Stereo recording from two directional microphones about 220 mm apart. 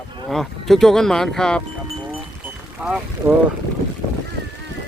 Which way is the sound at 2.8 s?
5° right (ahead or behind).